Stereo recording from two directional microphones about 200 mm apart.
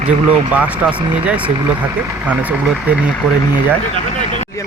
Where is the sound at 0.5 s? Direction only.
5° right (ahead or behind).